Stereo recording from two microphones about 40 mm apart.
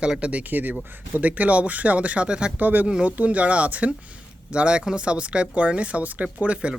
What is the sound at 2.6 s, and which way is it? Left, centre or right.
Speech, right.